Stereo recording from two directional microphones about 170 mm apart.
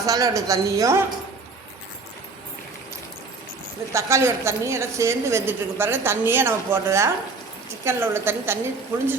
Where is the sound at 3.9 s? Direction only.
15° right (ahead or behind).